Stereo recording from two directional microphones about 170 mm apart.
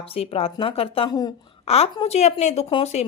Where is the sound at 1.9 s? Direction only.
35° left (ahead or behind).